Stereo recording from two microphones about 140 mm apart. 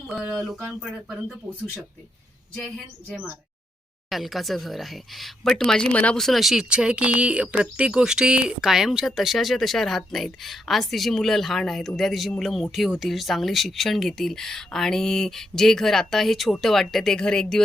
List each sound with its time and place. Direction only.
0.1 s speech: 5° right (ahead or behind)
2.6 s speech: centre (ahead or behind)